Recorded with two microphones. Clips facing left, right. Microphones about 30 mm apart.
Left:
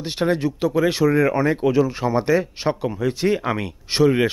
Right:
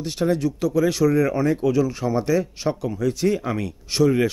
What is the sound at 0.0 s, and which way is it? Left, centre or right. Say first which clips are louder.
Speech: left 1 dB; left.